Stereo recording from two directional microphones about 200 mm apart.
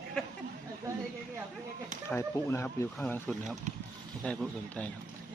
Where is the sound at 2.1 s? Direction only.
10° left (ahead or behind).